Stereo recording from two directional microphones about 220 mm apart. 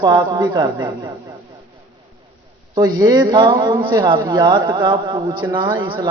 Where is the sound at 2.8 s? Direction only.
15° right (ahead or behind).